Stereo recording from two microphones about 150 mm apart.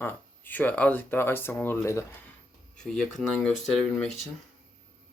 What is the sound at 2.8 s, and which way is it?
Speech, 5° left (ahead or behind).